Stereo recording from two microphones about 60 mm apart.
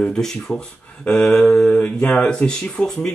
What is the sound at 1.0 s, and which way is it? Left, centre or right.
Mantra, centre.